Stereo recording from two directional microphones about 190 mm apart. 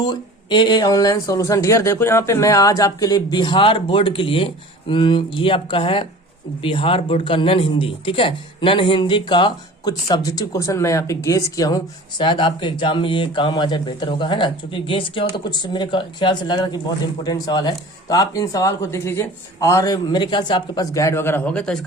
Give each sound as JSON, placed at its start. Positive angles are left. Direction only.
{"t": 0.0, "sound": "speech", "side_deg": 20}